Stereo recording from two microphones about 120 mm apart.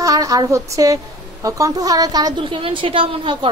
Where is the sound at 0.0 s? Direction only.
30° right (ahead or behind).